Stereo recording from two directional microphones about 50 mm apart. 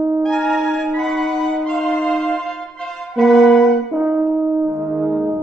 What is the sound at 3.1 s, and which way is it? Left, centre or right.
Brass instrument, centre.